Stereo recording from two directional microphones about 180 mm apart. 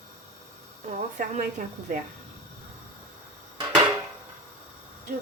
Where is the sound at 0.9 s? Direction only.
45° right (ahead or behind).